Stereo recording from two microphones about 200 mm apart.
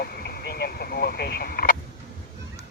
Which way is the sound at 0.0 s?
50° left (ahead or behind).